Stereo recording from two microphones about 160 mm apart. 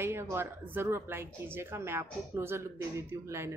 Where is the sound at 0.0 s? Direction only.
15° right (ahead or behind).